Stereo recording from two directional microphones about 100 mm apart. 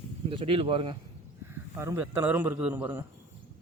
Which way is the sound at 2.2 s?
15° right (ahead or behind).